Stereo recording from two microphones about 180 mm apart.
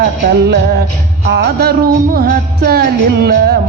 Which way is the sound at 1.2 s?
70° right (ahead or behind).